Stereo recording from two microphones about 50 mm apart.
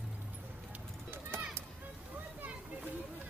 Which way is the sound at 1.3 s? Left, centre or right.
Right.